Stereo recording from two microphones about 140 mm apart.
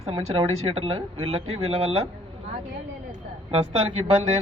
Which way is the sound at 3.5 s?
45° right (ahead or behind).